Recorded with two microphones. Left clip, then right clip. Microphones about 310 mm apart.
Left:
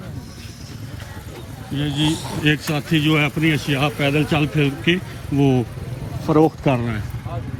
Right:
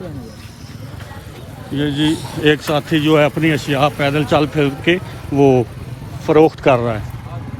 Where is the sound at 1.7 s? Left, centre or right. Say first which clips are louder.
Right 6 dB; centre.